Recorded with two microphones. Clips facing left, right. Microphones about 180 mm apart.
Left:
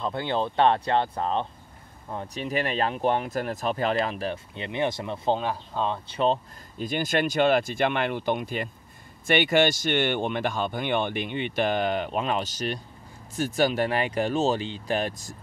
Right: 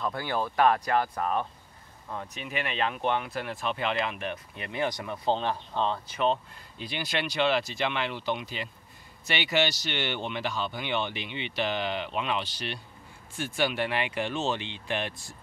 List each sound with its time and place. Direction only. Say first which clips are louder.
0.0 s speech: left 3 dB; 25° left (ahead or behind)
5.3 s speech: left 1 dB; 10° left (ahead or behind)
6.0 s speech: left 3 dB; 30° left (ahead or behind)
6.8 s speech: left 7 dB; 45° left (ahead or behind)